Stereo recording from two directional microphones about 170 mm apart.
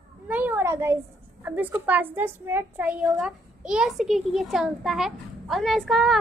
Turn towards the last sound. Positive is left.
turn(degrees=0)  # may be behind; listen again after turning